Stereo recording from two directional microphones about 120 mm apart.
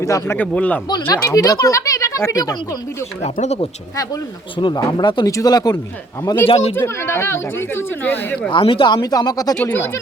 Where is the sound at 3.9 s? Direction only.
30° left (ahead or behind).